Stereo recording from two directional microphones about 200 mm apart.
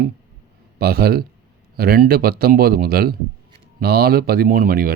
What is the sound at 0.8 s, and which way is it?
Speech, 50° right (ahead or behind).